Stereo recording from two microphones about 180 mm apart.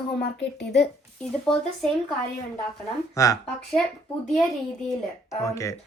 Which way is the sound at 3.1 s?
20° left (ahead or behind).